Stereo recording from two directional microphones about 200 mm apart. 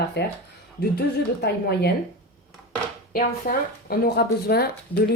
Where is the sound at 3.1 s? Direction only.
45° left (ahead or behind).